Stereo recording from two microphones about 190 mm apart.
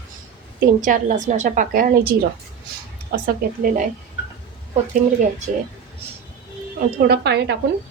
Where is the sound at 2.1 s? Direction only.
55° right (ahead or behind).